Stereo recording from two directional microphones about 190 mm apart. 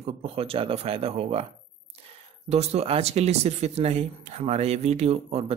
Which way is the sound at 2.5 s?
35° right (ahead or behind).